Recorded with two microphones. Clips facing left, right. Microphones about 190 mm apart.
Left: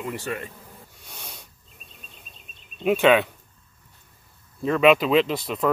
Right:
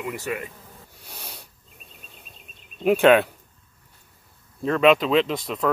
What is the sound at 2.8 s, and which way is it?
Speech, 5° right (ahead or behind).